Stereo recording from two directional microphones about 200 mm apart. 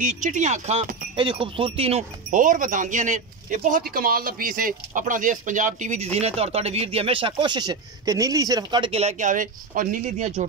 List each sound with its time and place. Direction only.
0.0 s speech: 40° right (ahead or behind)